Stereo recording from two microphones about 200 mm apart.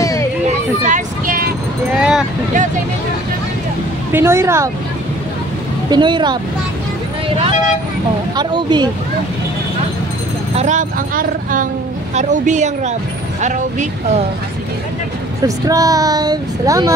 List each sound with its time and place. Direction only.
0.0 s a sound: 15° left (ahead or behind)
0.8 s music: 40° right (ahead or behind)
2.0 s speech: 5° right (ahead or behind)
4.1 s speech: 10° right (ahead or behind)
5.9 s speech: 25° right (ahead or behind)
10.5 s speech: 35° right (ahead or behind)
15.4 s speech: 15° right (ahead or behind)